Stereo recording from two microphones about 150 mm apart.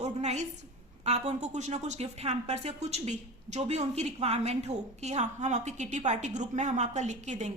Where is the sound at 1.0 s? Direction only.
45° right (ahead or behind).